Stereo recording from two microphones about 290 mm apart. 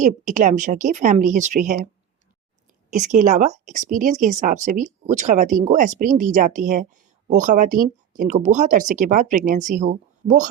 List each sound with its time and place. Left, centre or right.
0.0 s speech: right
2.9 s speech: right